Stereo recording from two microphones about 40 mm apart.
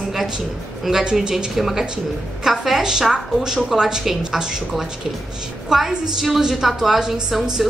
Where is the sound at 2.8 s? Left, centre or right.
Centre.